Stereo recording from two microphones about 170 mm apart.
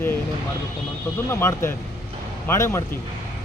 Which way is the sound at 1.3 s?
15° left (ahead or behind).